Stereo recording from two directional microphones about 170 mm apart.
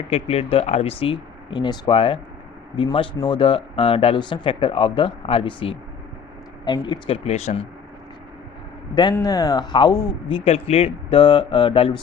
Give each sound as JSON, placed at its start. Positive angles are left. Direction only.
{"t": 0.1, "sound": "speech", "side_deg": 35}
{"t": 7.3, "sound": "speech", "side_deg": 40}
{"t": 9.1, "sound": "speech", "side_deg": 20}